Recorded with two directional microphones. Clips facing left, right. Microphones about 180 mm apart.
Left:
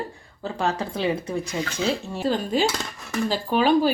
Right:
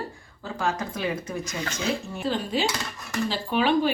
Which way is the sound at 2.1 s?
35° left (ahead or behind).